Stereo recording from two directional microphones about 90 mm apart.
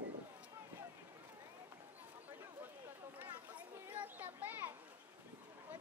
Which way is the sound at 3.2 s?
20° right (ahead or behind).